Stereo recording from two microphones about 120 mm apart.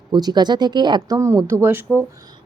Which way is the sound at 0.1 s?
35° right (ahead or behind).